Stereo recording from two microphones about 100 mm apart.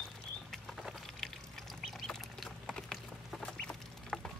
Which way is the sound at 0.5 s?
Centre (ahead or behind).